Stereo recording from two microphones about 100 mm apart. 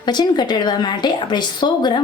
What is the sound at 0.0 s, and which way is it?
A woman's voice, 45° left (ahead or behind).